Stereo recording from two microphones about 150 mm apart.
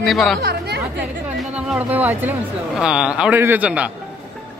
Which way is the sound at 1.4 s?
5° right (ahead or behind).